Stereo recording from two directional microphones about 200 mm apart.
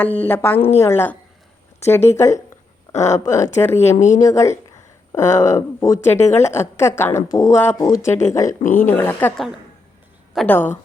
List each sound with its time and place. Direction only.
0.0 s a woman's voice: 10° left (ahead or behind)
3.9 s speech: 35° left (ahead or behind)
4.2 s a woman's voice: 15° left (ahead or behind)